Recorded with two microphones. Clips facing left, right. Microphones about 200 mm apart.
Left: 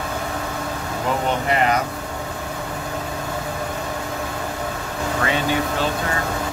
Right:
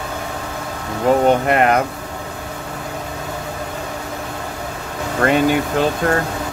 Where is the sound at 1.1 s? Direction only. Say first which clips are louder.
Right 9 dB; 40° right (ahead or behind).